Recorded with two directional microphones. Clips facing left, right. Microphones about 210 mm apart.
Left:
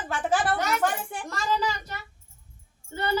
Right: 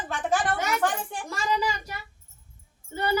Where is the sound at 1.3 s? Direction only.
10° right (ahead or behind).